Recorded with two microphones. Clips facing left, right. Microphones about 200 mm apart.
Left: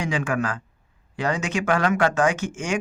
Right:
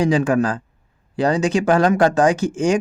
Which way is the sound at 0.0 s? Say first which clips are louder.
Right 8 dB; 35° right (ahead or behind).